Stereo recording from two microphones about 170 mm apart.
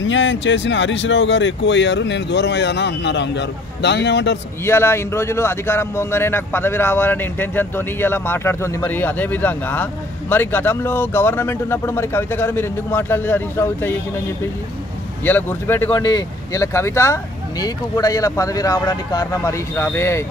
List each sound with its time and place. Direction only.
0.0 s speech: 90° left
4.6 s speech: 15° left (ahead or behind)
15.2 s speech: 10° left (ahead or behind)
15.9 s speech: 25° left (ahead or behind)